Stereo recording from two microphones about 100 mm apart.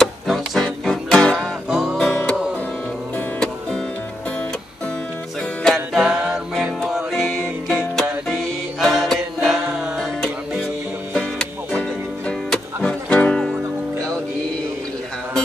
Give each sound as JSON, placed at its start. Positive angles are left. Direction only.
{"t": 0.0, "sound": "music", "side_deg": 0}
{"t": 2.0, "sound": "music", "side_deg": 10}
{"t": 5.9, "sound": "music", "side_deg": -10}
{"t": 6.5, "sound": "music", "side_deg": 0}
{"t": 11.1, "sound": "music", "side_deg": 10}